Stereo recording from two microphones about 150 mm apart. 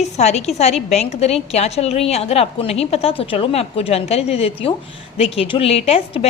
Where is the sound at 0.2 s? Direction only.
45° left (ahead or behind).